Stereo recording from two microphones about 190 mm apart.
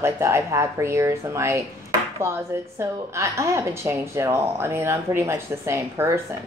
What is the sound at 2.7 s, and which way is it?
A woman's voice, 15° right (ahead or behind).